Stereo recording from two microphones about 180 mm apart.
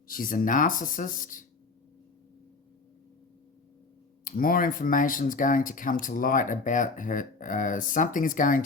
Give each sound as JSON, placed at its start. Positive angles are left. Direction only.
{"t": 0.1, "sound": "speech", "side_deg": 50}
{"t": 4.2, "sound": "speech", "side_deg": 50}